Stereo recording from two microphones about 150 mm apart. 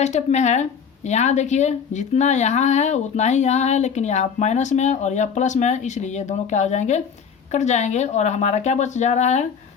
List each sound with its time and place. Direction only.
0.0 s a woman's voice: 50° left (ahead or behind)